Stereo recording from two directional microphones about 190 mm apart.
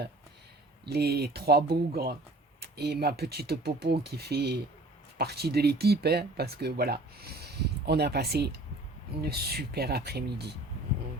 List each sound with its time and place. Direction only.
0.9 s speech: 55° right (ahead or behind)